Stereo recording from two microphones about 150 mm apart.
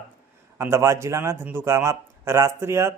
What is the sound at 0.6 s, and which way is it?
A man's voice, 20° right (ahead or behind).